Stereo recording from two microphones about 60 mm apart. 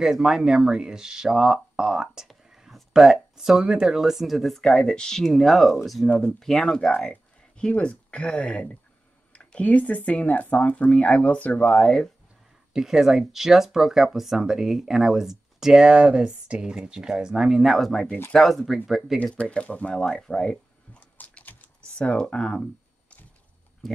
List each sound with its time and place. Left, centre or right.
0.0 s speech: centre
12.7 s speech: centre
19.5 s speech: left
19.9 s speech: centre
21.0 s typing: left
21.9 s speech: centre